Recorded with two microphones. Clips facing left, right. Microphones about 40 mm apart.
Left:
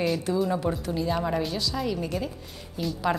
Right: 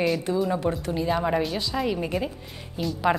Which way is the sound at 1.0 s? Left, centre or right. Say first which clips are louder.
Right 4 dB; centre.